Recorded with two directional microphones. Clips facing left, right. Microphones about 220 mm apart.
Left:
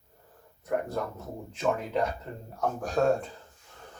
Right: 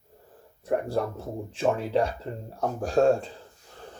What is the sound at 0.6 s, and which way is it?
Speech, 30° right (ahead or behind).